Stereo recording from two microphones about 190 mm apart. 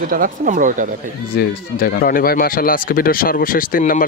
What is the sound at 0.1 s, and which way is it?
Speech, 45° right (ahead or behind).